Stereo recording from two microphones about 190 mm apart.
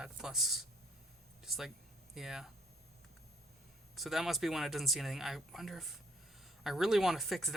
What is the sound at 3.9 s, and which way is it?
Speech, centre (ahead or behind).